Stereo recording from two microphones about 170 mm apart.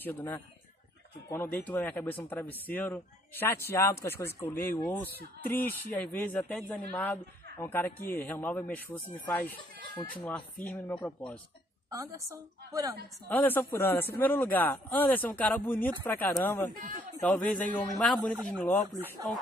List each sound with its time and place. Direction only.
0.0 s speech: 10° left (ahead or behind)
11.9 s a woman's voice: 20° right (ahead or behind)
13.3 s speech: 10° left (ahead or behind)
16.7 s speech: 55° right (ahead or behind)
17.2 s speech: 10° left (ahead or behind)
18.9 s speech: 15° right (ahead or behind)